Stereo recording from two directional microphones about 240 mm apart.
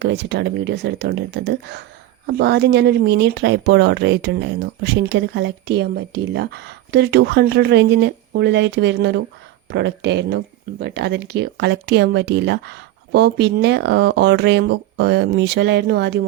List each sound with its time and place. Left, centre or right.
0.0 s speech: right